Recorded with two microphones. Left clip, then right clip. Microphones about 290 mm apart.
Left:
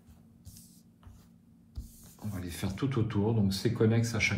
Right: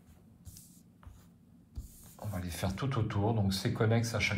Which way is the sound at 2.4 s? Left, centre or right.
Right.